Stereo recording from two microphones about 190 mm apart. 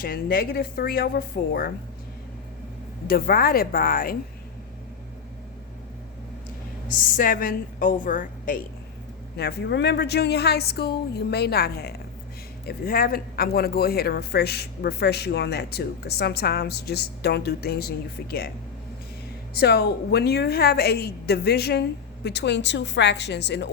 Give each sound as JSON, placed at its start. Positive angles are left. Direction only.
{"t": 0.0, "sound": "a woman's voice", "side_deg": 50}
{"t": 3.1, "sound": "a woman's voice", "side_deg": 50}
{"t": 6.9, "sound": "a woman's voice", "side_deg": 45}
{"t": 9.4, "sound": "speech", "side_deg": 60}
{"t": 19.5, "sound": "speech", "side_deg": 55}